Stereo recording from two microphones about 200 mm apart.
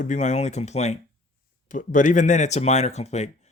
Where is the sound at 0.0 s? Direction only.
35° left (ahead or behind).